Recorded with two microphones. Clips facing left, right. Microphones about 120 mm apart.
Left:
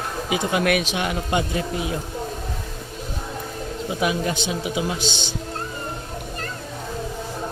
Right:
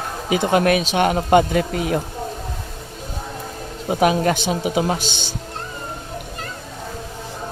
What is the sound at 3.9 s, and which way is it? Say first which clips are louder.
Speech: right 7 dB; 45° right (ahead or behind).